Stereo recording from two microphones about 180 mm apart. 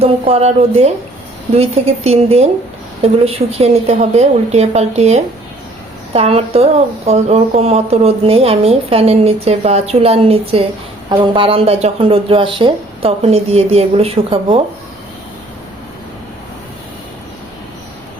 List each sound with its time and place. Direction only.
0.0 s speech: 35° right (ahead or behind)